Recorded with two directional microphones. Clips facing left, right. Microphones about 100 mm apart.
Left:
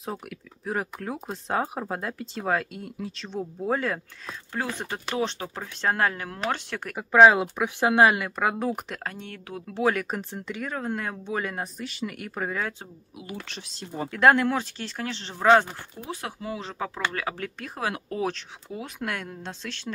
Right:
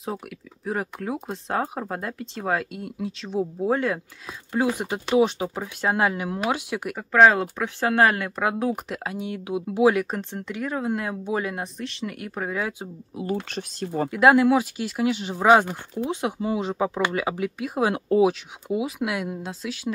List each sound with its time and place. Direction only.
0.7 s speech: centre (ahead or behind)
4.5 s speech: 15° right (ahead or behind)
7.0 s speech: 10° left (ahead or behind)
13.2 s speech: 45° right (ahead or behind)
14.1 s speech: 5° right (ahead or behind)
17.8 s speech: 20° right (ahead or behind)
18.2 s speech: 10° right (ahead or behind)